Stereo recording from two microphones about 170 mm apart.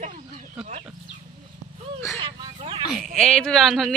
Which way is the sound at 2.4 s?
30° right (ahead or behind).